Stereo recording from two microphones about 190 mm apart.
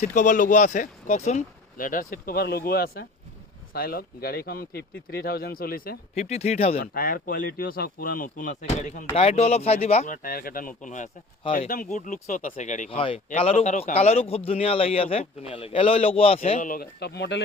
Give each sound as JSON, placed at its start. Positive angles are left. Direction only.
{"t": 0.0, "sound": "speech", "side_deg": 40}
{"t": 6.1, "sound": "speech", "side_deg": 35}
{"t": 6.7, "sound": "speech", "side_deg": 50}
{"t": 16.6, "sound": "speech", "side_deg": 45}